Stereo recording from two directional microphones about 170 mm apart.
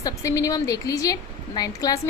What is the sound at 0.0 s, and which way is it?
A woman's voice, 20° left (ahead or behind).